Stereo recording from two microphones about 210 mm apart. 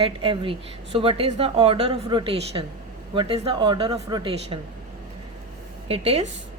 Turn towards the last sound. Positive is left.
turn(degrees=-30)  # may be behind; listen again after turning